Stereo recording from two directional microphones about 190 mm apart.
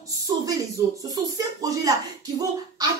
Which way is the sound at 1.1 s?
20° right (ahead or behind).